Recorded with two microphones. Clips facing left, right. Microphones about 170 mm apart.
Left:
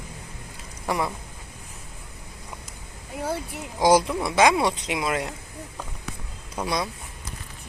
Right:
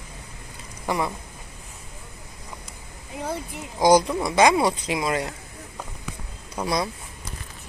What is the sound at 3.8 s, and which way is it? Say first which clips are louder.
Speech: right 2 dB; 5° left (ahead or behind).